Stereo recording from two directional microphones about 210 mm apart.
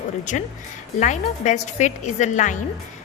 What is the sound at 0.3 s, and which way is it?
A woman's voice, 35° left (ahead or behind).